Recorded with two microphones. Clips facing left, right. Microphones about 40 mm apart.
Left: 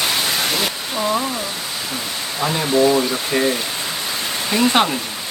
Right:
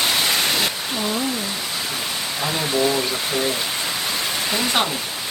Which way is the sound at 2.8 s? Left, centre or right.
Left.